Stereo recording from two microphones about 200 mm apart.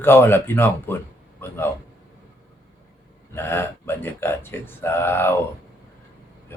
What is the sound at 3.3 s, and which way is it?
Speech, 10° left (ahead or behind).